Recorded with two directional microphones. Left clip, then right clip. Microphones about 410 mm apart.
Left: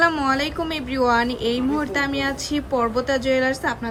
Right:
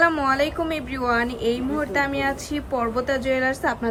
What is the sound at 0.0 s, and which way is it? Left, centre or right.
Speech, centre.